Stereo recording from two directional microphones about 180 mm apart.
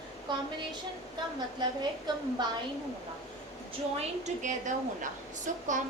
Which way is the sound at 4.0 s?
40° right (ahead or behind).